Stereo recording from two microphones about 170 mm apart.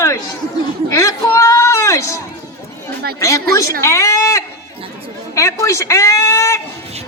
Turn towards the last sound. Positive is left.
turn(degrees=15)  # may be behind; listen again after turning